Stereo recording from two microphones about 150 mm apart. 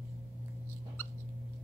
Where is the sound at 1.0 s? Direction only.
15° left (ahead or behind).